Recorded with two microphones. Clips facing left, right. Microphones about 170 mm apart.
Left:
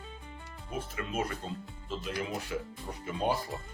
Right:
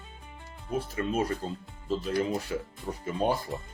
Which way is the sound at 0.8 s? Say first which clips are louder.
Right 5 dB; 35° right (ahead or behind).